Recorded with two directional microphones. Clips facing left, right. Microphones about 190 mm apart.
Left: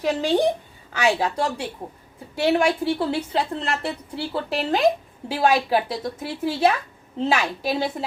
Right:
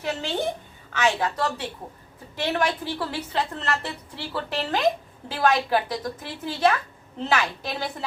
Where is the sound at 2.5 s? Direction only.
25° left (ahead or behind).